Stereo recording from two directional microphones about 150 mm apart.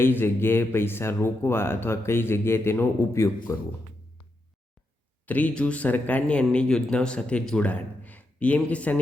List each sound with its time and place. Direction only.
0.0 s speech: 15° left (ahead or behind)
5.2 s speech: 10° left (ahead or behind)